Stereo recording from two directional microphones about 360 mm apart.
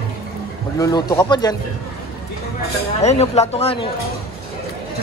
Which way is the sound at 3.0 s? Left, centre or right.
Centre.